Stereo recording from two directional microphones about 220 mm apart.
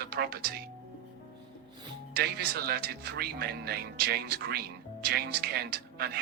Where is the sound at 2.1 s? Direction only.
45° right (ahead or behind).